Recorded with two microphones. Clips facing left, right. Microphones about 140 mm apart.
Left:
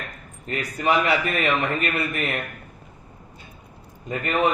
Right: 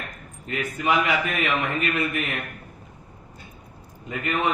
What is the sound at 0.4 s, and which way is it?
Speech, 35° left (ahead or behind).